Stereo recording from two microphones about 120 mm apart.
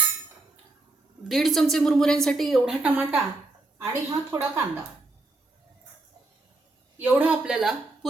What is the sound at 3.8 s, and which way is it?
Speech, 25° right (ahead or behind).